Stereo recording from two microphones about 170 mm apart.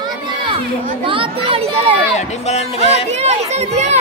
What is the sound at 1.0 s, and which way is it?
Speech, 30° right (ahead or behind).